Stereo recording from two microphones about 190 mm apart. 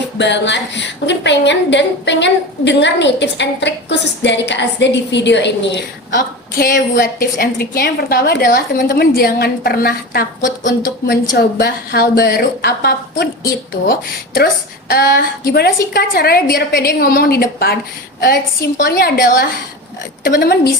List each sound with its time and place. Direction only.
0.2 s a woman's voice: 70° left (ahead or behind)
6.1 s a woman's voice: 45° left (ahead or behind)